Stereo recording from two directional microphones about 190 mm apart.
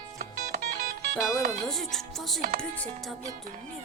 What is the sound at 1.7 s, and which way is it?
Music, centre (ahead or behind).